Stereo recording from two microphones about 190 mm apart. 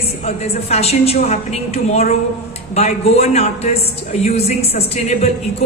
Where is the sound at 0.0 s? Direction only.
35° left (ahead or behind).